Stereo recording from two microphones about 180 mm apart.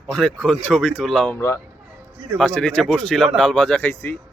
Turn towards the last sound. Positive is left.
turn(degrees=10)  # may be behind; listen again after turning